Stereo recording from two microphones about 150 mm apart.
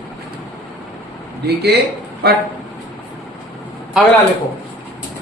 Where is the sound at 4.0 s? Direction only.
5° right (ahead or behind).